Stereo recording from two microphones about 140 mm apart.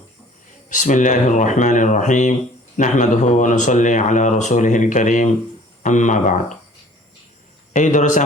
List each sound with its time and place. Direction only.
0.7 s speech: 65° left (ahead or behind)
7.7 s speech: 60° left (ahead or behind)